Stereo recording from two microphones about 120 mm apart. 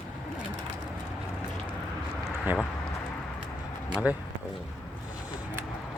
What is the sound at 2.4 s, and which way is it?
Speech, 15° right (ahead or behind).